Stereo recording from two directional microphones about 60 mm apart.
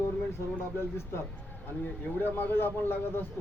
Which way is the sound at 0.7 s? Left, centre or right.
Left.